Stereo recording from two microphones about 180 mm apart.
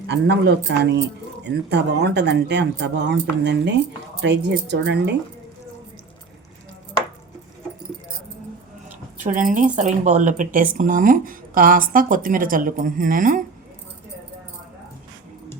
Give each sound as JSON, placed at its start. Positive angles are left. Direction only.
{"t": 0.1, "sound": "speech", "side_deg": -70}
{"t": 9.3, "sound": "speech", "side_deg": -45}